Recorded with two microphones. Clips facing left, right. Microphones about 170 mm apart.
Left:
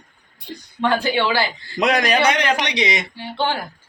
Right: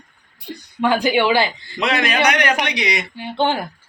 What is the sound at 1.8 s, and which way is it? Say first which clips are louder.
Speech: left 2 dB; 45° left (ahead or behind).